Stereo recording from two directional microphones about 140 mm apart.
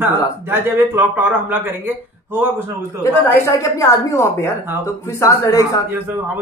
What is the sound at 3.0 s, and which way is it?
A woman's voice, 25° left (ahead or behind).